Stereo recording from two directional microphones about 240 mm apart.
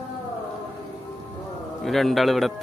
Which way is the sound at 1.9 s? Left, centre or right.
Centre.